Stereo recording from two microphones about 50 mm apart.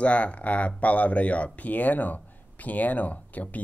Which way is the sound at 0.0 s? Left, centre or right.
Left.